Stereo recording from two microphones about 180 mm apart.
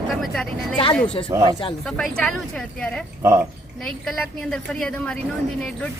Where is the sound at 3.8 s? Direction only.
5° left (ahead or behind).